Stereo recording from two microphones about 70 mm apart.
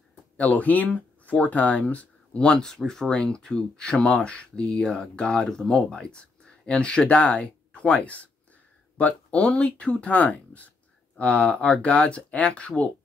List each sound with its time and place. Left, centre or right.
0.1 s speech: left